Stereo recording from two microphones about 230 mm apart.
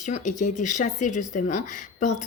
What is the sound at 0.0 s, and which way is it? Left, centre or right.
Speech, left.